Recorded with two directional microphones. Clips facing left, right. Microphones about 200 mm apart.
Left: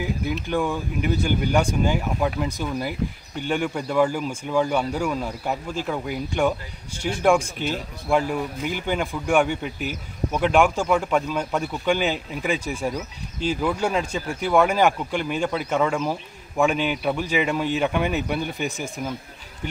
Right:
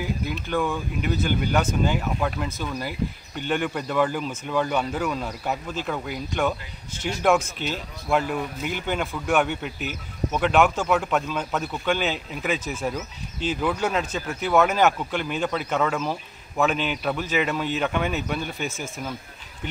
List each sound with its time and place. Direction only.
0.3 s a man's voice: 15° left (ahead or behind)
7.5 s speech: 50° left (ahead or behind)
8.1 s a man's voice: 10° left (ahead or behind)